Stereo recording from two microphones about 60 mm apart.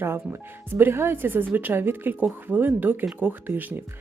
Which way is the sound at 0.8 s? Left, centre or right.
Right.